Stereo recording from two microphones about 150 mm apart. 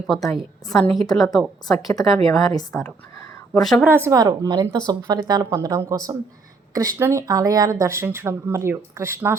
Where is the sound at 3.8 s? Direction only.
15° right (ahead or behind).